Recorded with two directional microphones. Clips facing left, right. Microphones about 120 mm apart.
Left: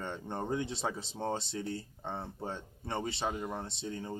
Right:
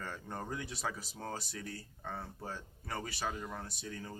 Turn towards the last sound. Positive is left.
turn(degrees=25)  # may be behind; listen again after turning